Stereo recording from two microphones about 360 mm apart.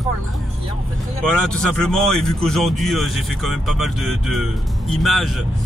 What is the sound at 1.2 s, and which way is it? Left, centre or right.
Speech, centre.